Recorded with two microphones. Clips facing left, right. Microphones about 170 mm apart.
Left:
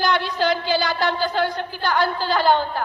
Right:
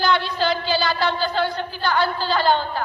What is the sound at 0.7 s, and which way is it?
A woman's voice, 15° left (ahead or behind).